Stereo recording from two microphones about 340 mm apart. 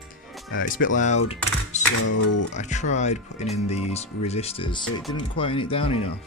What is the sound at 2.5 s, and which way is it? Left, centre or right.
Speech, left.